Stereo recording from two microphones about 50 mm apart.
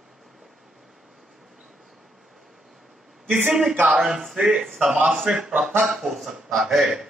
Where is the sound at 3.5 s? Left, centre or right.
Centre.